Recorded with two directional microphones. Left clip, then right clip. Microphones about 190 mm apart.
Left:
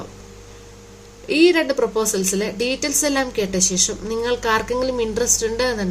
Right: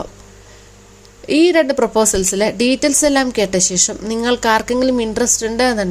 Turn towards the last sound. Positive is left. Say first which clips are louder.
# right 5 dB
turn(degrees=-40)  # may be behind; listen again after turning